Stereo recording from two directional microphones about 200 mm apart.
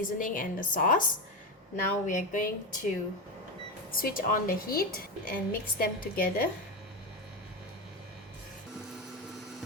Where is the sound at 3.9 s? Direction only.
45° left (ahead or behind).